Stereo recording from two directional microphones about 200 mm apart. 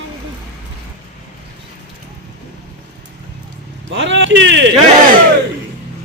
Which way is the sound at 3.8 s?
65° right (ahead or behind).